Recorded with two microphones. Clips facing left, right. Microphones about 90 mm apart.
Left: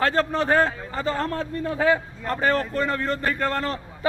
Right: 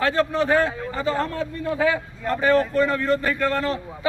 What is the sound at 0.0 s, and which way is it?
A man's voice, 35° left (ahead or behind).